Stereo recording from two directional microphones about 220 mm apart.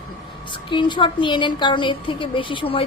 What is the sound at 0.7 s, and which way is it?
A woman's voice, 20° left (ahead or behind).